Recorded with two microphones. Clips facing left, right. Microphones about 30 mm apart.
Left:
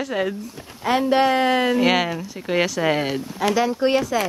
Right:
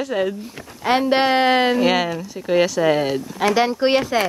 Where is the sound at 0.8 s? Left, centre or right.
Right.